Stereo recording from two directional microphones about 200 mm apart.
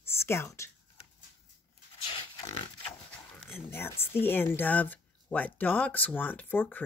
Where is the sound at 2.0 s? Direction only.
30° left (ahead or behind).